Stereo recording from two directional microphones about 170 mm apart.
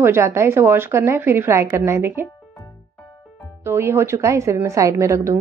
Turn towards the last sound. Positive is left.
turn(degrees=-15)  # may be behind; listen again after turning